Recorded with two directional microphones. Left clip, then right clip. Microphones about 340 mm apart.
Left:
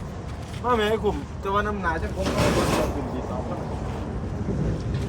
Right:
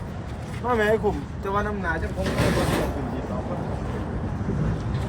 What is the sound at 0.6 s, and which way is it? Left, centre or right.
Speech, centre.